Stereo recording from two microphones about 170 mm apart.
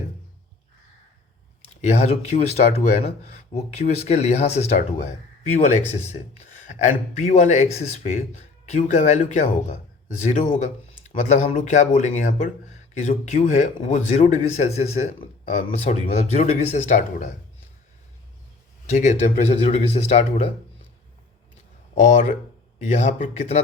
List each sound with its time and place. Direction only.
1.8 s a man's voice: 40° left (ahead or behind)
11.0 s a man's voice: 45° left (ahead or behind)
18.9 s a man's voice: 45° left (ahead or behind)
21.9 s a man's voice: 45° left (ahead or behind)